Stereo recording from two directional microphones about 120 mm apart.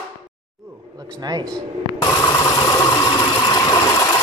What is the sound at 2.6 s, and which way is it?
Engine, 25° left (ahead or behind).